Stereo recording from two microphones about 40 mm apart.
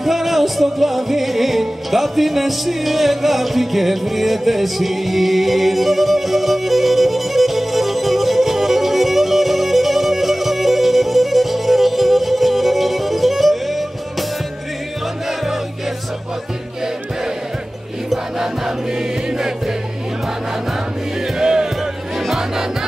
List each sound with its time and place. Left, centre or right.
0.0 s music: centre
15.2 s music: centre
19.3 s music: centre
21.4 s music: centre